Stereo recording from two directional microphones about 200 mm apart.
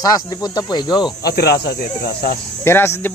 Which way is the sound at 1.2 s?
55° left (ahead or behind).